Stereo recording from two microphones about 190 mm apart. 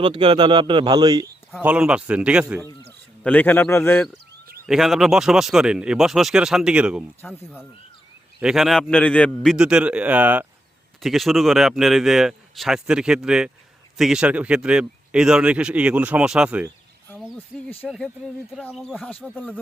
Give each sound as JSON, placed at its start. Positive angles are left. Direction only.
{"t": 0.0, "sound": "speech", "side_deg": -25}
{"t": 1.5, "sound": "speech", "side_deg": -5}
{"t": 3.2, "sound": "a man's voice", "side_deg": 10}
{"t": 4.6, "sound": "speech", "side_deg": 0}
{"t": 7.2, "sound": "a man's voice", "side_deg": 10}
{"t": 8.4, "sound": "speech", "side_deg": 0}